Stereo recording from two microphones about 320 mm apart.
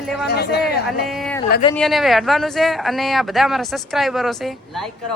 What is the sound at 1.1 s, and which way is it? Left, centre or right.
Speech, centre.